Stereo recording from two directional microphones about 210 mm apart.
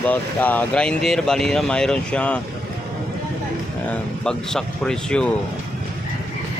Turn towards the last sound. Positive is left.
turn(degrees=5)  # may be behind; listen again after turning